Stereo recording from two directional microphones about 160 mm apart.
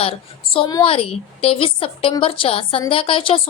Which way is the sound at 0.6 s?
25° left (ahead or behind).